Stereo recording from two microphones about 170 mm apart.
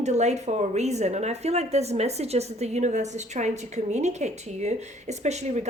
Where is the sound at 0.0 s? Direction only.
40° right (ahead or behind).